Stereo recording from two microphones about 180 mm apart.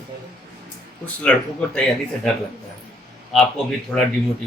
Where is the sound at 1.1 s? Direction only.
10° left (ahead or behind).